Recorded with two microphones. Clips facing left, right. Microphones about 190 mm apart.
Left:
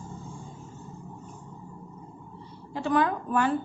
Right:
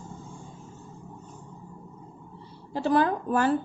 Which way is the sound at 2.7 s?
35° right (ahead or behind).